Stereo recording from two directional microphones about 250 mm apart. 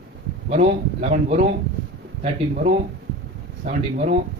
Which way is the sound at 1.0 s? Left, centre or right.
Right.